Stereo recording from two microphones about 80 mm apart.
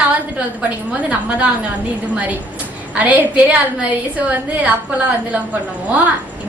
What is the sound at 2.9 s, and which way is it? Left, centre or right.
A woman's voice, centre.